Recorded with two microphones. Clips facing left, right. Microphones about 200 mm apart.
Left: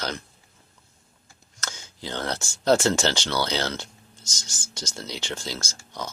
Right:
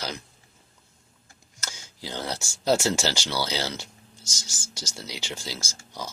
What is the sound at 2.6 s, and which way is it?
Speech, 5° right (ahead or behind).